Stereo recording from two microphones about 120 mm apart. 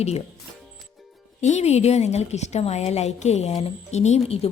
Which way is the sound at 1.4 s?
70° left (ahead or behind).